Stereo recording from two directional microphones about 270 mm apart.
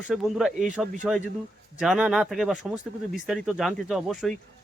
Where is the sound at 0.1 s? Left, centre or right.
Centre.